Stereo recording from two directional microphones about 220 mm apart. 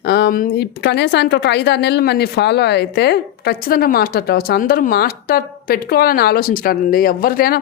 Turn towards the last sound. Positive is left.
turn(degrees=40)  # may be behind; listen again after turning